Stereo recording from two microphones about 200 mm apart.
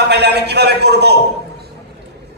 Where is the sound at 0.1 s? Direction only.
55° right (ahead or behind).